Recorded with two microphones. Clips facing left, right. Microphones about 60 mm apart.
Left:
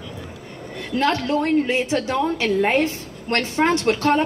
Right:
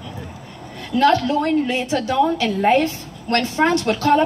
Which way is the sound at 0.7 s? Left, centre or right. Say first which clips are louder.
Right 5 dB; left.